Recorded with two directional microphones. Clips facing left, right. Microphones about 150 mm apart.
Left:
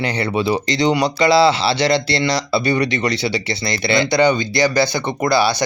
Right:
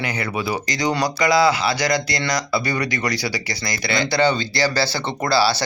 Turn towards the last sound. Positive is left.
turn(degrees=20)  # may be behind; listen again after turning